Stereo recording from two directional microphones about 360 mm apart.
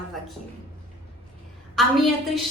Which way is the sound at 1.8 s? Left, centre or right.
Centre.